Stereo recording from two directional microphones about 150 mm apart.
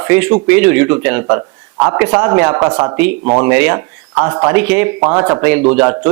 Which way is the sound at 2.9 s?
10° right (ahead or behind).